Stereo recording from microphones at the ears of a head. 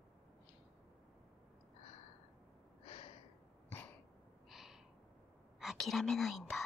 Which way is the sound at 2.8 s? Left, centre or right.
Left.